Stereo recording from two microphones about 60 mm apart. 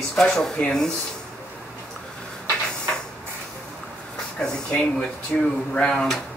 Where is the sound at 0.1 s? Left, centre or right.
Centre.